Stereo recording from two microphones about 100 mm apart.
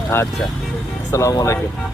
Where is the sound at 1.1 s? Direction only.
30° left (ahead or behind).